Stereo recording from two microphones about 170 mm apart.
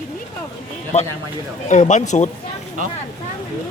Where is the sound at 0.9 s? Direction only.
40° left (ahead or behind).